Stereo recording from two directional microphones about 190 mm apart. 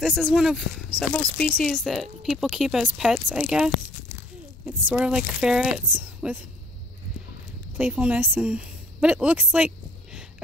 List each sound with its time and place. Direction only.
0.0 s speech: centre (ahead or behind)
7.7 s speech: 10° right (ahead or behind)